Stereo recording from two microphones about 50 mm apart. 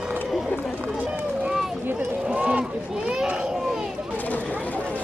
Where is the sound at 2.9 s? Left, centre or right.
Centre.